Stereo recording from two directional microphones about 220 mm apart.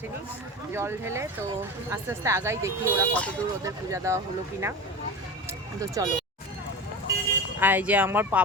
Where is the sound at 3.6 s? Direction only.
15° right (ahead or behind).